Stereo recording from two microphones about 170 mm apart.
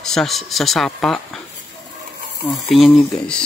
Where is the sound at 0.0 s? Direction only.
5° left (ahead or behind).